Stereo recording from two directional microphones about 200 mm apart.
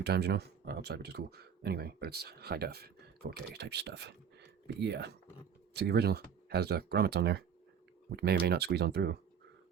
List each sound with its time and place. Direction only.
0.0 s speech: 55° right (ahead or behind)